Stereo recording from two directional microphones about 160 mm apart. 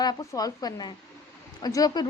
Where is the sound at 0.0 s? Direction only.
25° left (ahead or behind).